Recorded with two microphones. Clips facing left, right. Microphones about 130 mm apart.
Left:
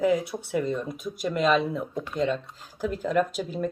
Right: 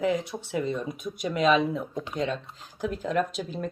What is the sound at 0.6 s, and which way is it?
Speech, 5° right (ahead or behind).